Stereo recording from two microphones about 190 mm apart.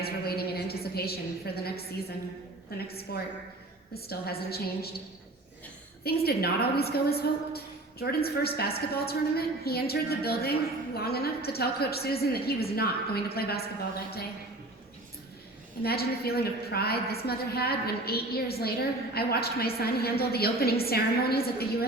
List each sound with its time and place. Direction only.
0.0 s a sound: 55° left (ahead or behind)
2.7 s a woman's voice: 55° left (ahead or behind)
6.0 s a woman's voice: 55° left (ahead or behind)
15.8 s a woman's voice: 55° left (ahead or behind)